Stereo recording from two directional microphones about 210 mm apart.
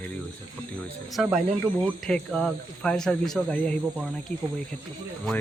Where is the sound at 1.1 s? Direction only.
Centre (ahead or behind).